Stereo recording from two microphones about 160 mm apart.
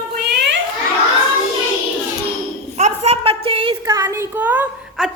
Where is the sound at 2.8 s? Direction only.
40° right (ahead or behind).